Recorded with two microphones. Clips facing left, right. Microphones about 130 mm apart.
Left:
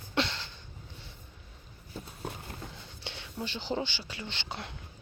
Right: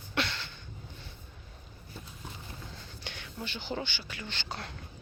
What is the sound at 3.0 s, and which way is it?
Whispering, 25° left (ahead or behind).